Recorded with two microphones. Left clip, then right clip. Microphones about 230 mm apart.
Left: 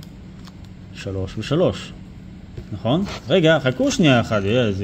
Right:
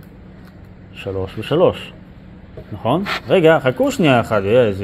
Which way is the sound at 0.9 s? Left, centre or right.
Left.